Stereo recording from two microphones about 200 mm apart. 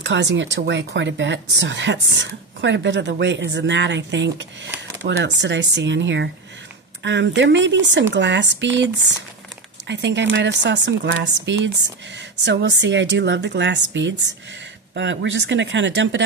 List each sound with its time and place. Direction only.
0.0 s speech: 65° right (ahead or behind)